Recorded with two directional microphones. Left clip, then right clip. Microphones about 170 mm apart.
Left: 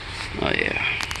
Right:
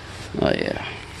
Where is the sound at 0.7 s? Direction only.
35° right (ahead or behind).